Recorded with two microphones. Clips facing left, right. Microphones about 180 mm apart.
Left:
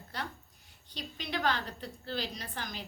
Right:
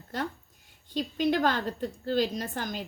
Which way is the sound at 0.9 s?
45° right (ahead or behind).